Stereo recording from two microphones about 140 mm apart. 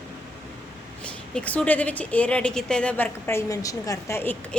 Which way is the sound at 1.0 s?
10° left (ahead or behind).